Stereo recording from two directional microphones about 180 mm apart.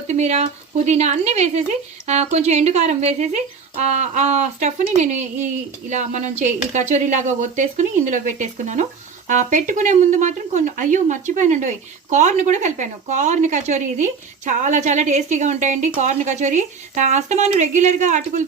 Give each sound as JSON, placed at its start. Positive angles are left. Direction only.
{"t": 0.1, "sound": "a woman's voice", "side_deg": -40}